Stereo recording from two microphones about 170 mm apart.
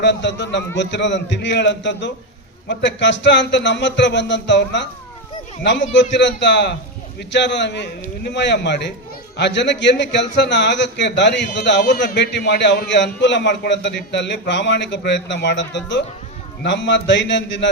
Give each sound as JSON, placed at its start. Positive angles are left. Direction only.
{"t": 0.0, "sound": "a man's voice", "side_deg": 90}